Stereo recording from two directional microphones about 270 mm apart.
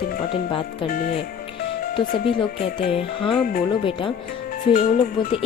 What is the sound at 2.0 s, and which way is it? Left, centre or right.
Speech, centre.